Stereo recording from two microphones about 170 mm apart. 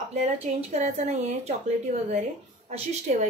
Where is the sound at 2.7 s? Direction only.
40° right (ahead or behind).